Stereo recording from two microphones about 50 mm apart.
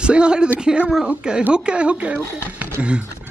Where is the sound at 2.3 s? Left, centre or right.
Right.